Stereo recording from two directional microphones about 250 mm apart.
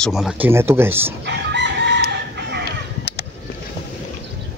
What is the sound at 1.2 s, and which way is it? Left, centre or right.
Chicken, right.